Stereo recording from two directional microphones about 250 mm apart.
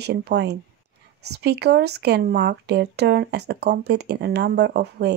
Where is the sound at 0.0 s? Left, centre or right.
Right.